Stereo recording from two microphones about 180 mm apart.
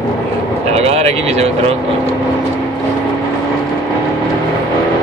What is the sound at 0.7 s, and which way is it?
Speech, 35° right (ahead or behind).